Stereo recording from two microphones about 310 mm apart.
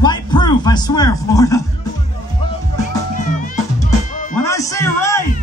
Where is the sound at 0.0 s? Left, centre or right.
Centre.